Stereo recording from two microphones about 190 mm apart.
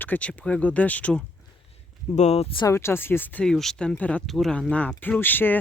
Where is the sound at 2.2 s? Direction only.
35° left (ahead or behind).